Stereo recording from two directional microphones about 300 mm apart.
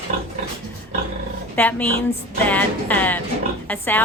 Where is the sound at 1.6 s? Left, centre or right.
Centre.